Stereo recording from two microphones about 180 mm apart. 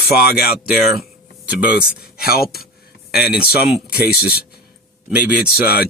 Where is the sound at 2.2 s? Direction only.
60° left (ahead or behind).